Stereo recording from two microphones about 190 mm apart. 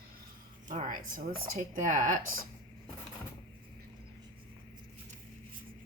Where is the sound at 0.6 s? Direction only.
45° right (ahead or behind).